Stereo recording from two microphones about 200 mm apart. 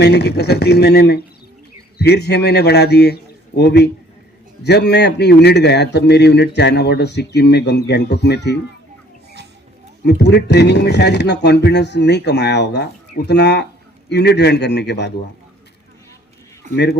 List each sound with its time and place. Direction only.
0.0 s a man's voice: 55° left (ahead or behind)
10.1 s a man's voice: 60° left (ahead or behind)
16.7 s a man's voice: 55° left (ahead or behind)